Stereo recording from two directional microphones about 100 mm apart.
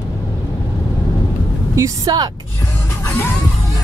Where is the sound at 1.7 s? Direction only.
30° right (ahead or behind).